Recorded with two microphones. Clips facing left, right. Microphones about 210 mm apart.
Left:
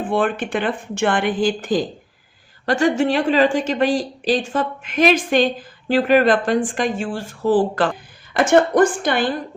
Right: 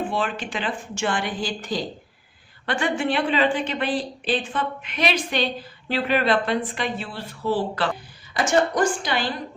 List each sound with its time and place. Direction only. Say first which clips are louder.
0.0 s a woman's voice: left 6 dB; 55° left (ahead or behind)